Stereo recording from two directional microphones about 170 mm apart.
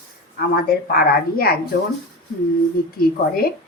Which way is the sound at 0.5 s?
60° left (ahead or behind).